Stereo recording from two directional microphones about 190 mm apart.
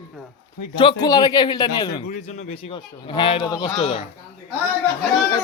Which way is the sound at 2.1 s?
35° left (ahead or behind).